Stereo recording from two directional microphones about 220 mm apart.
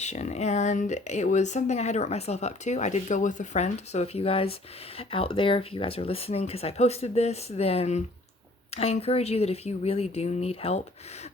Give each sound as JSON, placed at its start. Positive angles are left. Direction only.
{"t": 0.0, "sound": "speech", "side_deg": 30}